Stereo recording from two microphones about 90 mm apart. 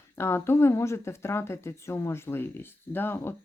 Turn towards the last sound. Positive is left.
turn(degrees=25)  # may be behind; listen again after turning